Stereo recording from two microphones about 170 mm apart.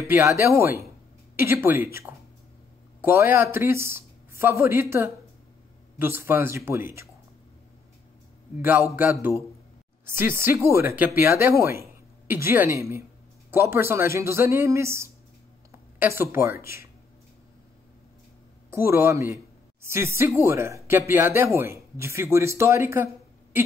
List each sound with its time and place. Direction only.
0.0 s speech: 15° right (ahead or behind)
8.5 s speech: 10° right (ahead or behind)
10.1 s a woman's voice: 15° right (ahead or behind)
15.7 s a sound: 15° right (ahead or behind)
16.6 s speech: 15° right (ahead or behind)
18.7 s a man's voice: 15° right (ahead or behind)